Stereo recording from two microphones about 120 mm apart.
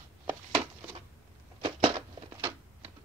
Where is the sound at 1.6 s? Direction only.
45° right (ahead or behind).